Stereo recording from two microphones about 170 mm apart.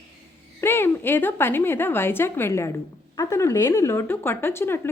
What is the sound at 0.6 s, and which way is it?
A woman's voice, 15° left (ahead or behind).